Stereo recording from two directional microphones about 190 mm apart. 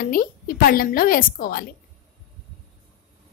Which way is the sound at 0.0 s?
50° left (ahead or behind).